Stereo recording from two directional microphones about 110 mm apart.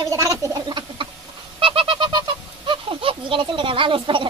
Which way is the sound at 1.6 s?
55° right (ahead or behind).